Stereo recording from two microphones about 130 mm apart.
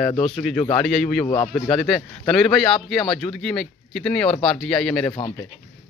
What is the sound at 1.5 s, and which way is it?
A man's voice, 5° left (ahead or behind).